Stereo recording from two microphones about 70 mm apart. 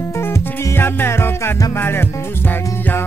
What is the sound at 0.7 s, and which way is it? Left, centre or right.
Music, left.